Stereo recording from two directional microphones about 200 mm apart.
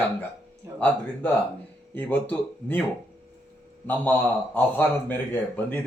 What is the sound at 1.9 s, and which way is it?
Speech, 10° left (ahead or behind).